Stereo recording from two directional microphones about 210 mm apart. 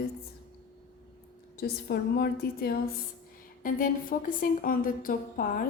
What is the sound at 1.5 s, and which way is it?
A woman's voice, 45° left (ahead or behind).